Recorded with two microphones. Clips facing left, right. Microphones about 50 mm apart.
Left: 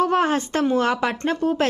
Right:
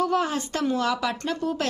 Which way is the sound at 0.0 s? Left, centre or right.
Left.